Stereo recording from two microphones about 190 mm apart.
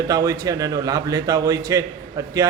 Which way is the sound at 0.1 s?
20° right (ahead or behind).